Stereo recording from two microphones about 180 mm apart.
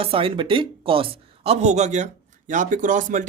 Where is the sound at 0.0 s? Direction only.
30° right (ahead or behind).